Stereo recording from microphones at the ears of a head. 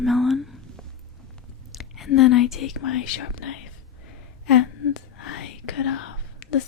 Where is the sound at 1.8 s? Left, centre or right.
Left.